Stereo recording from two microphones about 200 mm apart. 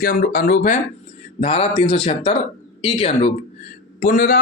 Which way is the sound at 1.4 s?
30° left (ahead or behind).